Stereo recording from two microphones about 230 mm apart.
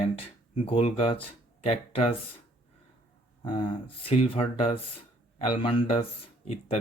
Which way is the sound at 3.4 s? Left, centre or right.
Left.